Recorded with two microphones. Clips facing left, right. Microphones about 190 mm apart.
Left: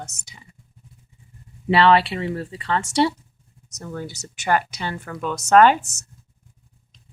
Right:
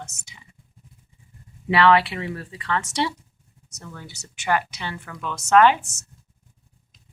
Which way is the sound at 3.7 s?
40° left (ahead or behind).